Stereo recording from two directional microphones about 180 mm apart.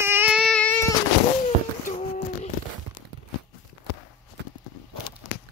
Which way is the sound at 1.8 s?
45° left (ahead or behind).